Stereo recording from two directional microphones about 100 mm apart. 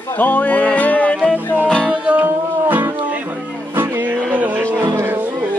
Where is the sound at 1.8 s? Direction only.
15° right (ahead or behind).